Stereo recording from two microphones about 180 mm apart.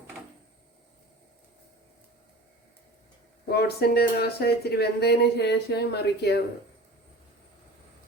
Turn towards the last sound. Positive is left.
turn(degrees=65)  # may be behind; listen again after turning